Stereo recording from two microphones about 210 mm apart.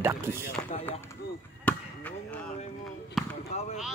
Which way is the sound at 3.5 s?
30° left (ahead or behind).